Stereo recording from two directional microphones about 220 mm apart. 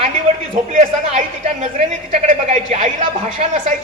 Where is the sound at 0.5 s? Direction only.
30° right (ahead or behind).